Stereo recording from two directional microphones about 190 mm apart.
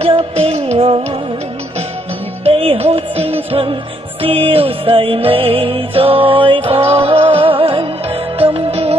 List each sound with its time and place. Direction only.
0.0 s music: 35° right (ahead or behind)
2.4 s music: 30° right (ahead or behind)